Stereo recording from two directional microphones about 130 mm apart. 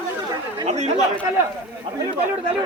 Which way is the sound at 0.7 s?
60° right (ahead or behind).